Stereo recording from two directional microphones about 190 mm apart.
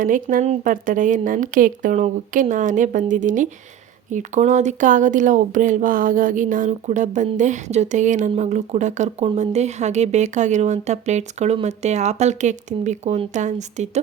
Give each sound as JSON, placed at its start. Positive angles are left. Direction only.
{"t": 0.0, "sound": "a woman's voice", "side_deg": -45}